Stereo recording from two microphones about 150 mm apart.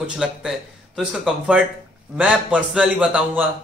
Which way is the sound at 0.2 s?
5° right (ahead or behind).